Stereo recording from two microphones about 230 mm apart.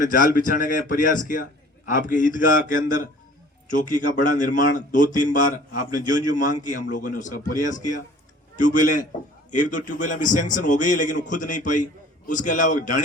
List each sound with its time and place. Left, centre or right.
0.0 s a man's voice: left